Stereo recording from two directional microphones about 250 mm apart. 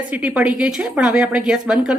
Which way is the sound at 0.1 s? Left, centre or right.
Centre.